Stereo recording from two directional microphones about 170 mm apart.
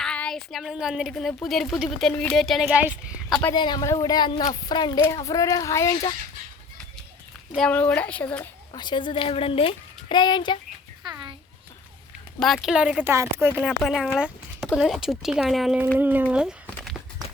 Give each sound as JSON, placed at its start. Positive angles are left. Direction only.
{"t": 0.0, "sound": "speech", "side_deg": 5}
{"t": 3.5, "sound": "a woman's voice", "side_deg": 25}
{"t": 7.5, "sound": "speech", "side_deg": 5}
{"t": 8.7, "sound": "a woman's voice", "side_deg": 25}
{"t": 11.0, "sound": "a sound", "side_deg": -25}
{"t": 12.4, "sound": "speech", "side_deg": 0}
{"t": 13.7, "sound": "speech", "side_deg": 0}